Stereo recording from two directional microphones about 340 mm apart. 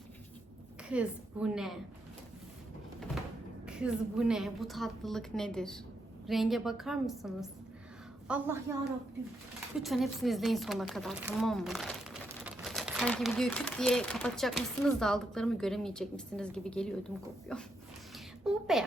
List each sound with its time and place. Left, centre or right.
0.9 s speech: centre
3.7 s speech: centre
9.7 s speech: centre
18.1 s a sound: centre